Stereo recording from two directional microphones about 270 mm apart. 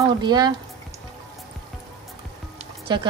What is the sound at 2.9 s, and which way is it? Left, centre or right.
Speech, centre.